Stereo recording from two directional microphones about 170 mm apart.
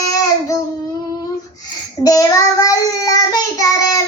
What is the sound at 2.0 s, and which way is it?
Child singing, 20° left (ahead or behind).